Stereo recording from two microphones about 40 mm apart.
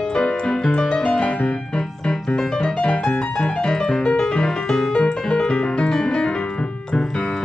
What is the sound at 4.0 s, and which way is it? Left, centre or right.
Music, left.